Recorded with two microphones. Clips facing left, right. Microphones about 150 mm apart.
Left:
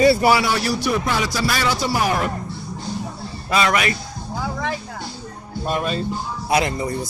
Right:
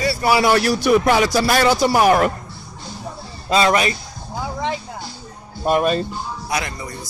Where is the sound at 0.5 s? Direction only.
60° right (ahead or behind).